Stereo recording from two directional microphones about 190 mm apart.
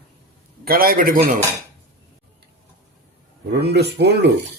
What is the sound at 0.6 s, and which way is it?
Speech, 50° right (ahead or behind).